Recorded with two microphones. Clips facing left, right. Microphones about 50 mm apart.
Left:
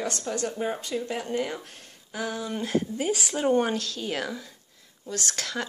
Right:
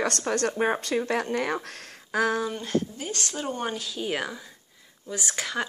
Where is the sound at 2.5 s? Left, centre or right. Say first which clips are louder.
Left 1 dB; centre.